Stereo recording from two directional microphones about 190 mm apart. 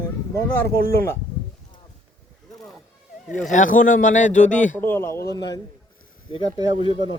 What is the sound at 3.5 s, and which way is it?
Speech, 45° left (ahead or behind).